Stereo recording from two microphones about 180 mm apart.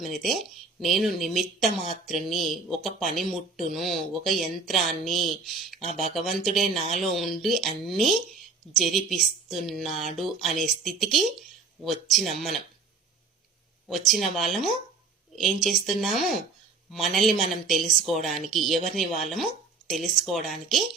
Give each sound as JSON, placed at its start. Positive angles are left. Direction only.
{"t": 0.0, "sound": "speech", "side_deg": 0}
{"t": 13.8, "sound": "speech", "side_deg": 0}